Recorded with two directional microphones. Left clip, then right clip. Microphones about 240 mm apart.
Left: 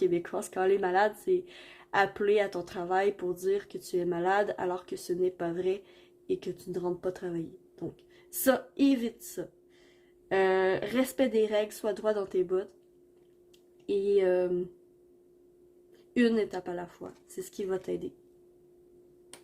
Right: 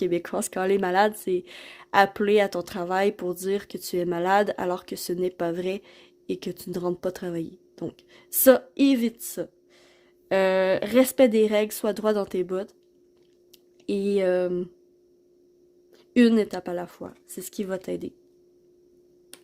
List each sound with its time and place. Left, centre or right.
0.0 s speech: right
13.8 s speech: right
16.1 s speech: right